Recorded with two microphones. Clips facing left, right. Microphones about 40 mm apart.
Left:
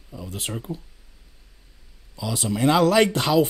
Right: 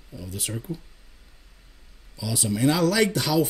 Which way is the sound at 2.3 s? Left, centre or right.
Left.